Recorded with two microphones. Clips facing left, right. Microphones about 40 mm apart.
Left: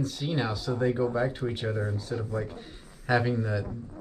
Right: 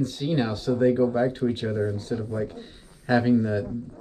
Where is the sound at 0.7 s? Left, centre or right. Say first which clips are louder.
Right 6 dB; centre.